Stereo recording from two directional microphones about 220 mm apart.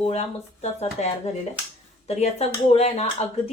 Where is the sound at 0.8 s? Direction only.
30° left (ahead or behind).